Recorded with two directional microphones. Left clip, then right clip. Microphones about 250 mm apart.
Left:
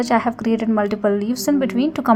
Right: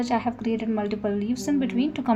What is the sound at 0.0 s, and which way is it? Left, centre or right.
A woman's voice, left.